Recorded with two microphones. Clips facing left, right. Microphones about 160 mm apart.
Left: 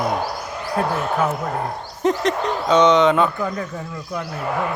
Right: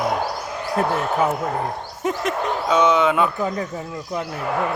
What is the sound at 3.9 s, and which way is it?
Speech, 20° right (ahead or behind).